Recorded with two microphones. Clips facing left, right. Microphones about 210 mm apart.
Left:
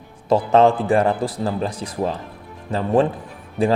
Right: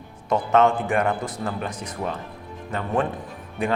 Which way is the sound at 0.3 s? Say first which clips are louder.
Left 4 dB; 30° left (ahead or behind).